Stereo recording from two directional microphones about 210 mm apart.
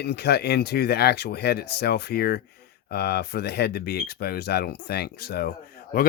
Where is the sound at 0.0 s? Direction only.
50° left (ahead or behind).